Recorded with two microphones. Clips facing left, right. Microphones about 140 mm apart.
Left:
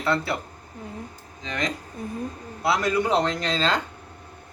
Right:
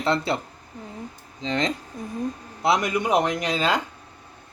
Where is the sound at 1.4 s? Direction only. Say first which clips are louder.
Right 4 dB; 25° right (ahead or behind).